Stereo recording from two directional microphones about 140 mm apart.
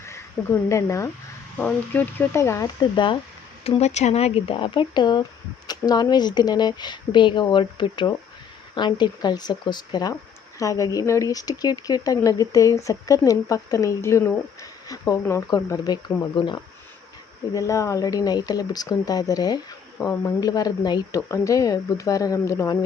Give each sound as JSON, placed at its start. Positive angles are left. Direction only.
{"t": 0.0, "sound": "speech", "side_deg": 20}
{"t": 2.9, "sound": "speech", "side_deg": 35}
{"t": 3.6, "sound": "speech", "side_deg": 45}
{"t": 17.5, "sound": "speech", "side_deg": 20}